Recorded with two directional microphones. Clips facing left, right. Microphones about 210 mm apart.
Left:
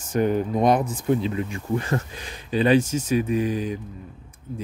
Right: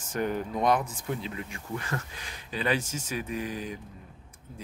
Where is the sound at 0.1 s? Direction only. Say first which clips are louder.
Left 8 dB; 20° left (ahead or behind).